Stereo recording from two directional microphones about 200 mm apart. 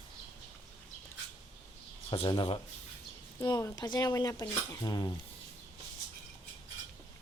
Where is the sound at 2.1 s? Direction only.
25° left (ahead or behind).